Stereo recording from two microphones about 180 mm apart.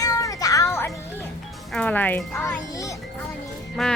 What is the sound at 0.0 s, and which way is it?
Music, 20° left (ahead or behind).